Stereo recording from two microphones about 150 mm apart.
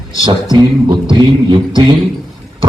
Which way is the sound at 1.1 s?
30° right (ahead or behind).